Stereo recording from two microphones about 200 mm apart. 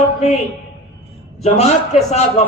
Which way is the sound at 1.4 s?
35° left (ahead or behind).